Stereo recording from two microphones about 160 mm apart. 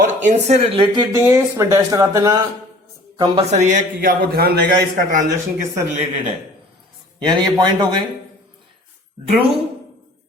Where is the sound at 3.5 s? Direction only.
50° right (ahead or behind).